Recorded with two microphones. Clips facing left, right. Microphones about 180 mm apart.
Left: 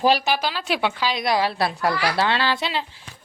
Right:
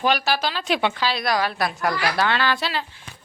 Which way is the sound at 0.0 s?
30° left (ahead or behind).